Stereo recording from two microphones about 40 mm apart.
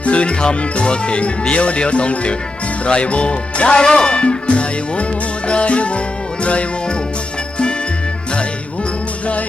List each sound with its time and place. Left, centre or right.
0.0 s speech: left
6.4 s music: left